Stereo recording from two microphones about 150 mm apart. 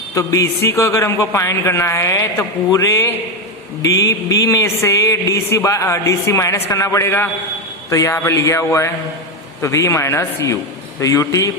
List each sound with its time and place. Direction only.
0.1 s a man's voice: 20° left (ahead or behind)